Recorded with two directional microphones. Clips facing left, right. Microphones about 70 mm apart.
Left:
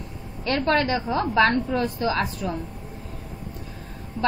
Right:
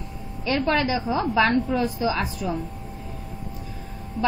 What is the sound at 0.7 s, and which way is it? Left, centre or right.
A woman's voice, left.